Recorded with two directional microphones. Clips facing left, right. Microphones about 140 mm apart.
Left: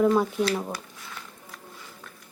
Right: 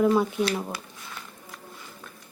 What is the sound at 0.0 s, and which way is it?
Speech, centre (ahead or behind).